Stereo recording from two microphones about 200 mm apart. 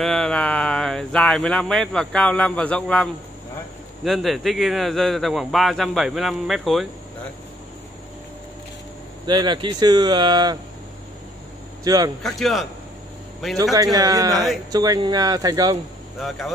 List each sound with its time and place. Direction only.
0.0 s a man's voice: 5° left (ahead or behind)
9.2 s speech: 20° right (ahead or behind)
11.8 s speech: 20° right (ahead or behind)
12.2 s a man's voice: centre (ahead or behind)
13.9 s speech: 20° right (ahead or behind)
16.2 s a man's voice: centre (ahead or behind)